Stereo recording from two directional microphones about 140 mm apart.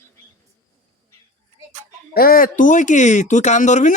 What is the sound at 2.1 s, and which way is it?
Speech, 90° left.